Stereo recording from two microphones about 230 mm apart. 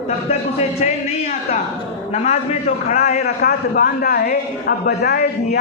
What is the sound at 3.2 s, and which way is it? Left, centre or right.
A man's voice, left.